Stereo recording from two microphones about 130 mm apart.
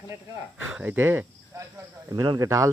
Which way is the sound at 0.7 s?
15° right (ahead or behind).